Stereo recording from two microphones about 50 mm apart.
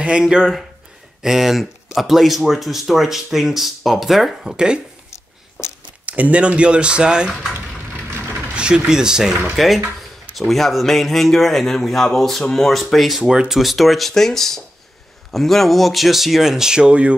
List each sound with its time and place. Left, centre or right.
0.0 s speech: centre
6.0 s speech: right
7.5 s a sound: right
8.5 s speech: centre
10.3 s speech: centre
13.2 s speech: centre
13.5 s speech: centre